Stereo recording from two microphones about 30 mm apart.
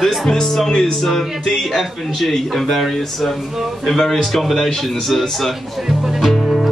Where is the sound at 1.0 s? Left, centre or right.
Centre.